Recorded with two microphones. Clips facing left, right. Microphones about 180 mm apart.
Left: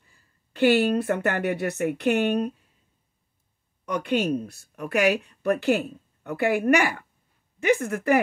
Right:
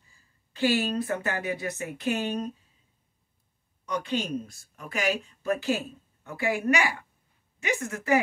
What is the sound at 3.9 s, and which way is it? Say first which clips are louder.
A woman's voice: left 5 dB; 55° left (ahead or behind).